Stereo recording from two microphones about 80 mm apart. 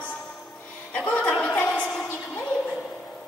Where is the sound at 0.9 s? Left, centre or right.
Centre.